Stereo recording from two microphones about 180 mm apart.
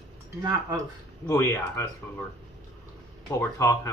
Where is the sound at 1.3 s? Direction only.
15° left (ahead or behind).